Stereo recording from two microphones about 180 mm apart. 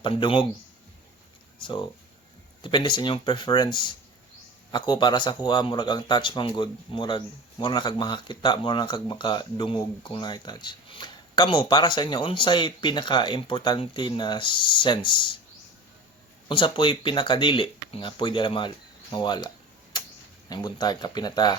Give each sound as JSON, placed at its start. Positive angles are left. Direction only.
{"t": 0.0, "sound": "speech", "side_deg": 30}
{"t": 1.6, "sound": "speech", "side_deg": 25}
{"t": 16.5, "sound": "speech", "side_deg": 30}
{"t": 19.9, "sound": "a sound", "side_deg": 25}
{"t": 20.5, "sound": "speech", "side_deg": 25}